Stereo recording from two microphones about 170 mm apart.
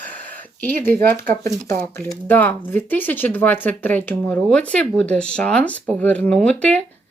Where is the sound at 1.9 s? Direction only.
15° left (ahead or behind).